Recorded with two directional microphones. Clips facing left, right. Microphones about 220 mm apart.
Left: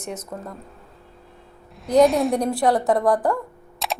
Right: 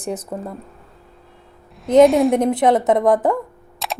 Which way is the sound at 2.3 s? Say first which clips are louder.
Right 4 dB; 20° right (ahead or behind).